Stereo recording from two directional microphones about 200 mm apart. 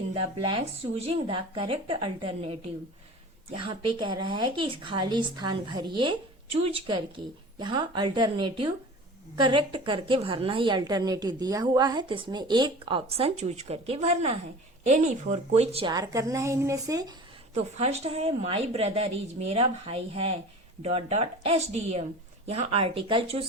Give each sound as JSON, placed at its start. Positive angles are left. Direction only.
{"t": 0.1, "sound": "a woman's voice", "side_deg": -25}
{"t": 17.5, "sound": "a woman's voice", "side_deg": -30}